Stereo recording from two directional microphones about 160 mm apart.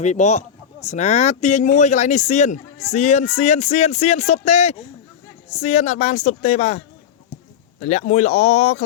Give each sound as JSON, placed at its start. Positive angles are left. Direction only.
{"t": 0.0, "sound": "speech", "side_deg": 45}